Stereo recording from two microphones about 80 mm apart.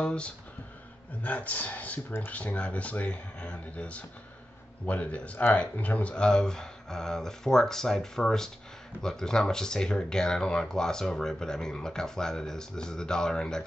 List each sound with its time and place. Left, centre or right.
0.0 s speech: centre